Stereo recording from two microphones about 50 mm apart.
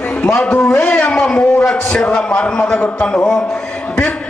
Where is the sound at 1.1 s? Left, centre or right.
Centre.